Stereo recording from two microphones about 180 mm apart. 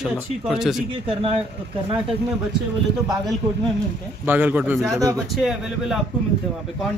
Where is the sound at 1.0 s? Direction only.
30° right (ahead or behind).